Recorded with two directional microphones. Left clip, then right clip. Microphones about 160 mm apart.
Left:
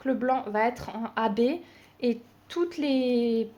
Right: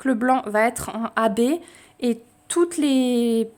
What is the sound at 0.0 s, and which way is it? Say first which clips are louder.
A woman's voice: right 6 dB; 90° right.